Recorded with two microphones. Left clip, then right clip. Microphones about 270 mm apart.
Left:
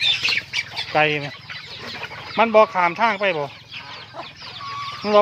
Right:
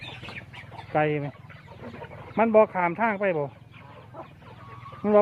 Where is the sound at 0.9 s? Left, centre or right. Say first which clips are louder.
Left 6 dB; centre.